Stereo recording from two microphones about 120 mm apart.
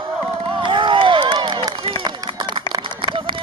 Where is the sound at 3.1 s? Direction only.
45° right (ahead or behind).